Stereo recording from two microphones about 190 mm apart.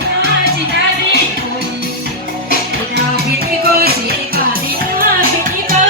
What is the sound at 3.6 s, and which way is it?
Music, 55° right (ahead or behind).